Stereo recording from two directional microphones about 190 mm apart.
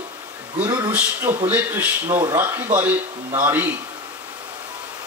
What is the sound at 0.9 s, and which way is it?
Speech, 10° right (ahead or behind).